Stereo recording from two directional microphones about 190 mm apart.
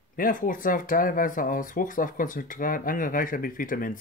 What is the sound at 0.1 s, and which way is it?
Speech, 45° left (ahead or behind).